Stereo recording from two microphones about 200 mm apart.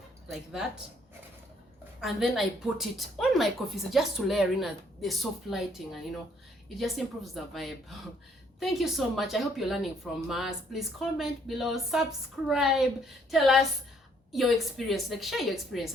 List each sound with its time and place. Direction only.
0.3 s speech: centre (ahead or behind)
2.0 s speech: centre (ahead or behind)